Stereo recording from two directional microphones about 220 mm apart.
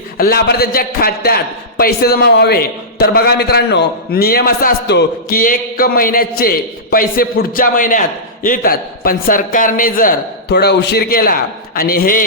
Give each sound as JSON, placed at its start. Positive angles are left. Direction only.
{"t": 0.2, "sound": "a man's voice", "side_deg": 45}